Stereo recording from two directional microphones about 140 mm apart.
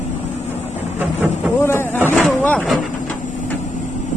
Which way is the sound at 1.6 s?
15° left (ahead or behind).